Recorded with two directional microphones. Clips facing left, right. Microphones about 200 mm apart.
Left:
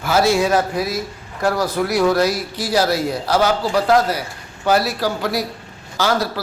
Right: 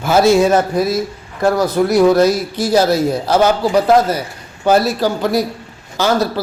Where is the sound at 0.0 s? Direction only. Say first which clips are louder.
Right 5 dB; 25° right (ahead or behind).